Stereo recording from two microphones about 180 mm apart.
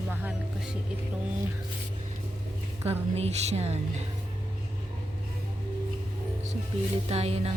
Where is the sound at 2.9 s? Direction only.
35° right (ahead or behind).